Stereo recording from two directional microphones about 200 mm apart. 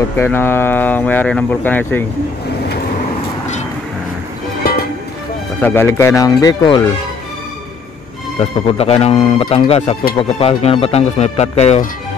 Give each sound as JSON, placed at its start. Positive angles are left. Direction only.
{"t": 0.2, "sound": "speech", "side_deg": 10}
{"t": 4.6, "sound": "music", "side_deg": 50}
{"t": 5.6, "sound": "speech", "side_deg": 10}
{"t": 8.7, "sound": "speech", "side_deg": 30}